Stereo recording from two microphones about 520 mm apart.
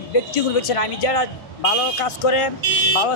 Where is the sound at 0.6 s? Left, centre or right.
Left.